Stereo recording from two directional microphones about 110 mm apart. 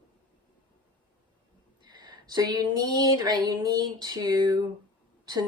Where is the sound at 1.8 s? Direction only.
40° right (ahead or behind).